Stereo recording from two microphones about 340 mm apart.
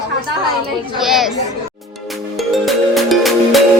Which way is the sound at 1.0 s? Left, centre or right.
Centre.